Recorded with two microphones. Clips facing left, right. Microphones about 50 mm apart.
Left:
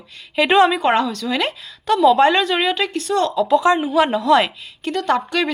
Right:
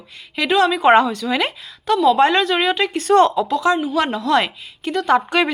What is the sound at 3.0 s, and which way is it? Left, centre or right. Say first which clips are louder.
Speech: right 10 dB; right.